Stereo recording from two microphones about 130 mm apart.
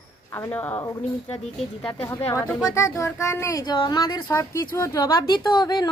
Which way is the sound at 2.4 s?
20° left (ahead or behind).